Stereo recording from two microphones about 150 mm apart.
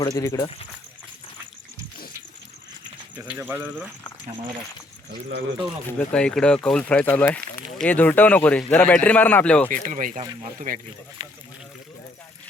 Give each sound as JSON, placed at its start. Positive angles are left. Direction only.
{"t": 0.0, "sound": "speech", "side_deg": 25}
{"t": 3.2, "sound": "speech", "side_deg": -15}
{"t": 6.0, "sound": "speech", "side_deg": 5}
{"t": 9.7, "sound": "speech", "side_deg": -60}
{"t": 11.2, "sound": "speech", "side_deg": -20}